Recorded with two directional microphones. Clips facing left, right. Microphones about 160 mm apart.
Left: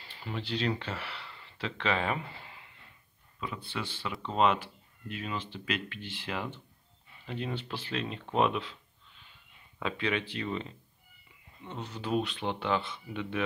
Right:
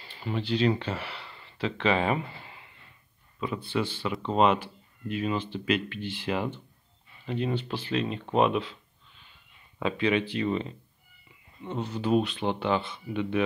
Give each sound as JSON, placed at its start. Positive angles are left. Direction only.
{"t": 0.4, "sound": "speech", "side_deg": -5}
{"t": 3.8, "sound": "speech", "side_deg": 0}
{"t": 9.8, "sound": "speech", "side_deg": -10}
{"t": 11.6, "sound": "speech", "side_deg": -25}
{"t": 12.0, "sound": "speech", "side_deg": -10}